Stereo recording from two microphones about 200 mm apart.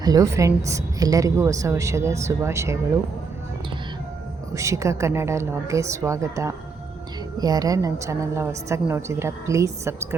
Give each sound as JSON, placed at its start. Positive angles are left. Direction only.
{"t": 0.0, "sound": "a woman's voice", "side_deg": -15}
{"t": 4.5, "sound": "a woman's voice", "side_deg": -15}